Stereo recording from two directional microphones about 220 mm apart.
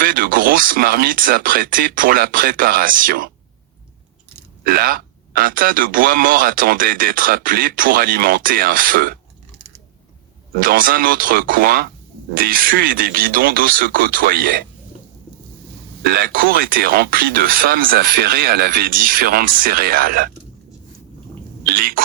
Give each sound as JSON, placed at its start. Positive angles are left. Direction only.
{"t": 0.0, "sound": "a man's voice", "side_deg": -40}
{"t": 4.6, "sound": "a man's voice", "side_deg": -40}
{"t": 10.6, "sound": "a man's voice", "side_deg": -40}
{"t": 16.0, "sound": "a man's voice", "side_deg": -40}
{"t": 21.6, "sound": "speech", "side_deg": -40}